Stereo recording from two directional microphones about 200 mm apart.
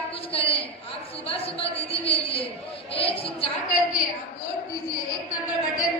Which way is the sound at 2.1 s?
30° left (ahead or behind).